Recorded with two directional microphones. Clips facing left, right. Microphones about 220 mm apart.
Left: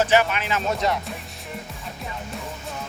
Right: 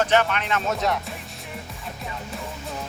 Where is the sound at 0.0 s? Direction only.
5° left (ahead or behind).